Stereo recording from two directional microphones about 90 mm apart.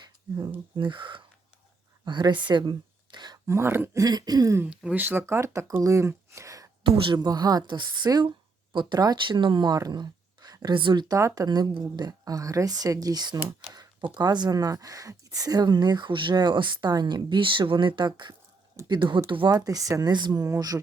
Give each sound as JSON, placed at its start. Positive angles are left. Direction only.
{"t": 0.0, "sound": "a sound", "side_deg": -50}
{"t": 0.8, "sound": "speech", "side_deg": -65}
{"t": 3.4, "sound": "speech", "side_deg": -30}
{"t": 4.0, "sound": "speech", "side_deg": -45}
{"t": 4.7, "sound": "speech", "side_deg": -10}
{"t": 5.0, "sound": "speech", "side_deg": -25}
{"t": 6.9, "sound": "speech", "side_deg": -65}
{"t": 10.8, "sound": "speech", "side_deg": -65}
{"t": 11.3, "sound": "speech", "side_deg": -50}
{"t": 16.9, "sound": "speech", "side_deg": -50}
{"t": 18.8, "sound": "a sound", "side_deg": -35}
{"t": 19.5, "sound": "speech", "side_deg": -45}